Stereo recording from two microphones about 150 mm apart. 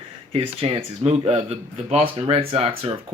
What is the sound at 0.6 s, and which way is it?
Speech, 40° right (ahead or behind).